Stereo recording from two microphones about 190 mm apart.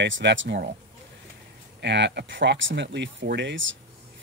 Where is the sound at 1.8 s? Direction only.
65° right (ahead or behind).